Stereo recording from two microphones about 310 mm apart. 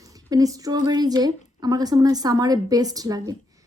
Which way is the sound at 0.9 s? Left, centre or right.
Centre.